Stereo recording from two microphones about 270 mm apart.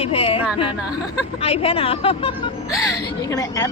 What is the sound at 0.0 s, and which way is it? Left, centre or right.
A woman's voice, left.